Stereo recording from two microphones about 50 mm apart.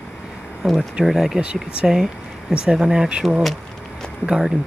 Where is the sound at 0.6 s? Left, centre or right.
Centre.